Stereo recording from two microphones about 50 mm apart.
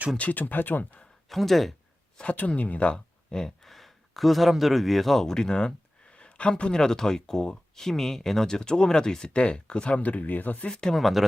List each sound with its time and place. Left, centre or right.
0.2 s speech: left
1.3 s speech: centre
2.3 s speech: left
10.0 s speech: left
10.7 s speech: centre
10.9 s speech: centre